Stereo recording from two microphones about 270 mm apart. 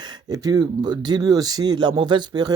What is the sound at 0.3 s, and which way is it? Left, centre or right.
Speech, centre.